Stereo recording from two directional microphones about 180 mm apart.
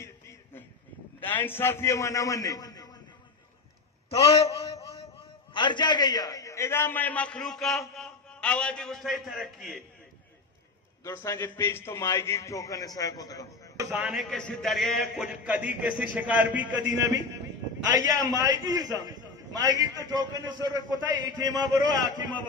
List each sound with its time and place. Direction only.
0.0 s a sound: 15° left (ahead or behind)
1.2 s a man's voice: 10° left (ahead or behind)
4.1 s a man's voice: 35° left (ahead or behind)
4.8 s a sound: 35° left (ahead or behind)
5.5 s a man's voice: 25° left (ahead or behind); by 9.8 s centre (ahead or behind)
11.0 s a man's voice: 15° left (ahead or behind)
13.7 s a man's voice: 10° right (ahead or behind)
17.9 s a man's voice: 20° right (ahead or behind)